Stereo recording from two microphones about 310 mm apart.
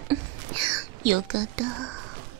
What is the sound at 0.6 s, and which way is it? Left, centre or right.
Whispering, right.